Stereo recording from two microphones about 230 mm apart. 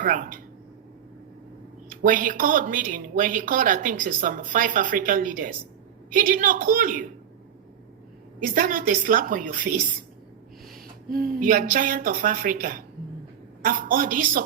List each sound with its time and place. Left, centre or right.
0.0 s speech: right
2.0 s speech: right
8.5 s speech: right
11.1 s speech: right